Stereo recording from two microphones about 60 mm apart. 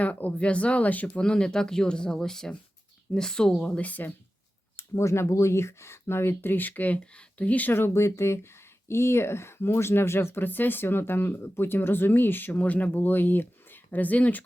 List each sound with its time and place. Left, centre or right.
0.0 s speech: left
1.2 s speech: centre
4.8 s speech: left
7.8 s speech: left